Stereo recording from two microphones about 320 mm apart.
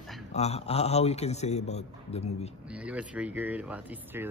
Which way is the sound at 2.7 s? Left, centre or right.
Centre.